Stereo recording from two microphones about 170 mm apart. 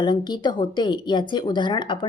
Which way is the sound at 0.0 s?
25° left (ahead or behind).